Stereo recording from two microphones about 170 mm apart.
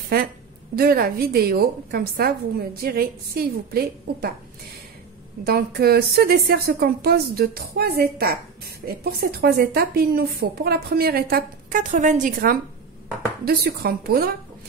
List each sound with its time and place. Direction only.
0.7 s a woman's voice: 60° right (ahead or behind)
5.4 s a woman's voice: 65° right (ahead or behind)
11.8 s a woman's voice: 45° right (ahead or behind); by 14.3 s 65° right (ahead or behind)